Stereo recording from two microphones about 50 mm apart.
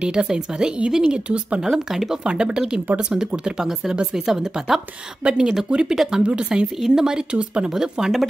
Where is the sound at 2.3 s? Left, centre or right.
Centre.